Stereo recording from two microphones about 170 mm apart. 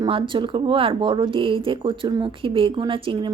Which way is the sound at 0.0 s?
30° right (ahead or behind).